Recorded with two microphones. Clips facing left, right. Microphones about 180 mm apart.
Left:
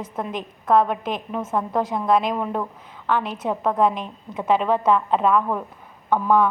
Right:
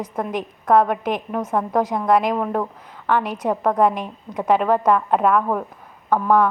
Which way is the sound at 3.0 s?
15° right (ahead or behind).